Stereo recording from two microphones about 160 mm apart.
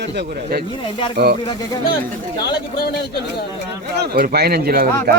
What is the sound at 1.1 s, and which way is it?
Speech, 80° right.